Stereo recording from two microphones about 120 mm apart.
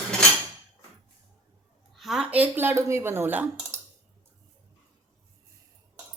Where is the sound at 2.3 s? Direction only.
15° right (ahead or behind).